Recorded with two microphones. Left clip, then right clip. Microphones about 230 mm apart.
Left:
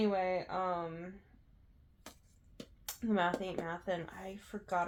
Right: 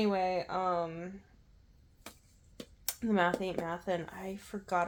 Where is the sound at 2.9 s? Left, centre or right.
Right.